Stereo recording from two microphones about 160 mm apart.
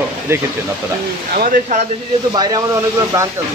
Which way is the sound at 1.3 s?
60° right (ahead or behind).